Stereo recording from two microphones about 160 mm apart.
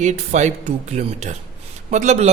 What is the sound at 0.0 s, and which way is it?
A man's voice, 45° right (ahead or behind).